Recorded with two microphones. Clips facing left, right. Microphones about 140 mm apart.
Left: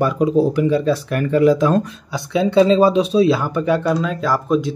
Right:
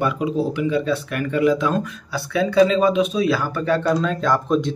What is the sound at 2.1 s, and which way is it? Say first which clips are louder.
Speech: left 2 dB; 25° left (ahead or behind).